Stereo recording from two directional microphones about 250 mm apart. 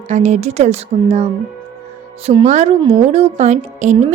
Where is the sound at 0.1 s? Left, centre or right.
Right.